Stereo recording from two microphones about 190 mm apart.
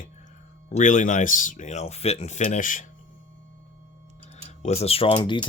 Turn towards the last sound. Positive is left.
turn(degrees=25)  # may be behind; listen again after turning